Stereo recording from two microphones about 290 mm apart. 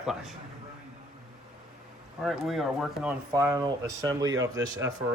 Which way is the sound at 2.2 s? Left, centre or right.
Centre.